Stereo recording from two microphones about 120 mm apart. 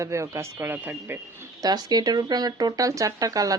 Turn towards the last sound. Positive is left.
turn(degrees=-30)  # may be behind; listen again after turning